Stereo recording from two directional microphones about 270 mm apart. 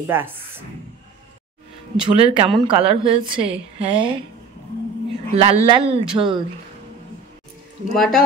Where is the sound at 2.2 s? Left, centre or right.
Right.